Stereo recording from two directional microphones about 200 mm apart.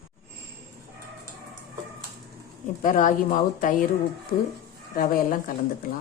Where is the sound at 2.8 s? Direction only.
40° left (ahead or behind).